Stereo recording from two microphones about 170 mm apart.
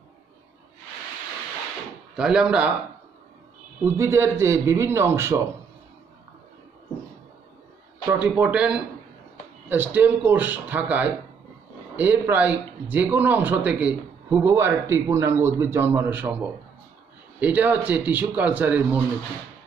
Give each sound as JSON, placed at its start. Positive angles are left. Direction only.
{"t": 2.1, "sound": "speech", "side_deg": -5}
{"t": 3.8, "sound": "a man's voice", "side_deg": -15}
{"t": 8.1, "sound": "a man's voice", "side_deg": -10}